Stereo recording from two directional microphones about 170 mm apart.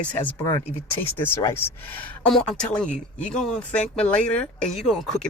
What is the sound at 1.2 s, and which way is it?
Speech, 15° left (ahead or behind).